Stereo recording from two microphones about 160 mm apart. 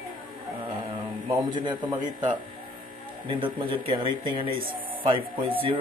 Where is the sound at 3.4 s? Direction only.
30° right (ahead or behind).